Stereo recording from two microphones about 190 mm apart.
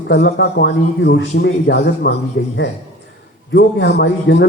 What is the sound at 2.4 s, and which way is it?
Speech, 70° left (ahead or behind).